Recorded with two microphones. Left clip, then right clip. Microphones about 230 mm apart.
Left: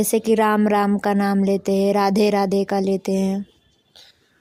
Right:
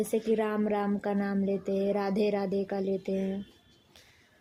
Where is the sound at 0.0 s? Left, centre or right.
Left.